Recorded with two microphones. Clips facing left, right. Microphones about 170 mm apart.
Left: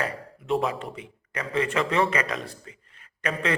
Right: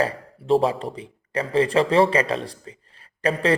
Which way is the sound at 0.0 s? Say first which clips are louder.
Right 7 dB; 30° right (ahead or behind).